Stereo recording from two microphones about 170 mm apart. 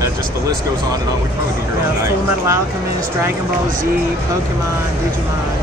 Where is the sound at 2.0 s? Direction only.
15° right (ahead or behind).